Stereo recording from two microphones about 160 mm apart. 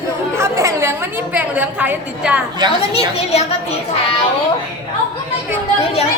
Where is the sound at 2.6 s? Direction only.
25° right (ahead or behind).